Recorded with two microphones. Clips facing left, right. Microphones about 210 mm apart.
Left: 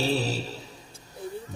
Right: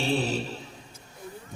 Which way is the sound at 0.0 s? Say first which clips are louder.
Even; 40° left (ahead or behind).